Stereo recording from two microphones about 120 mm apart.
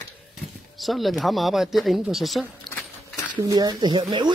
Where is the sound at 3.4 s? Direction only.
35° right (ahead or behind).